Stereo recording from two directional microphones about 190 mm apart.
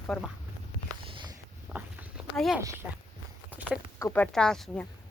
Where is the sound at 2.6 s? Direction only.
15° right (ahead or behind).